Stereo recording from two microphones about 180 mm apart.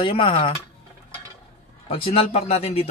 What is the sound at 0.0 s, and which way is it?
Speech, 30° left (ahead or behind).